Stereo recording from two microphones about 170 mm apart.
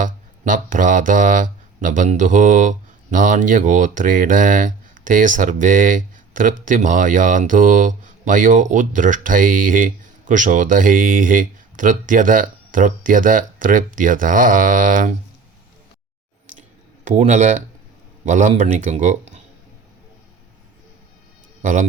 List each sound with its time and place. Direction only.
0.0 s speech: 50° right (ahead or behind)
16.6 s a sound: 45° right (ahead or behind)
18.3 s speech: 45° right (ahead or behind)
21.6 s speech: 50° right (ahead or behind)